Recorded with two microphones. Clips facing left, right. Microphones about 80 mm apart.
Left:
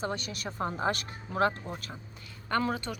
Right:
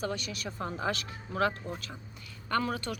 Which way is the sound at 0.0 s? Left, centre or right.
Left.